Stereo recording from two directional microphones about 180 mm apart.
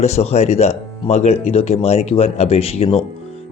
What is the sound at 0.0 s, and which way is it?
A man's voice, 35° left (ahead or behind).